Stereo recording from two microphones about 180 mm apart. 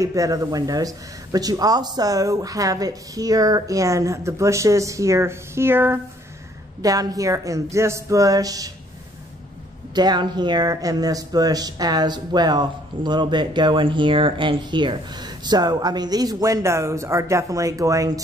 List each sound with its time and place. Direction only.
0.0 s speech: 20° right (ahead or behind)
9.9 s speech: 25° right (ahead or behind)